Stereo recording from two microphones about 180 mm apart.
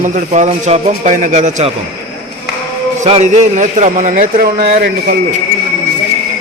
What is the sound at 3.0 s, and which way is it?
A man's voice, 40° right (ahead or behind).